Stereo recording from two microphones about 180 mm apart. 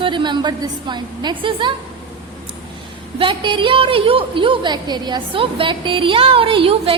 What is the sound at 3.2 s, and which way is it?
A woman's voice, 30° right (ahead or behind).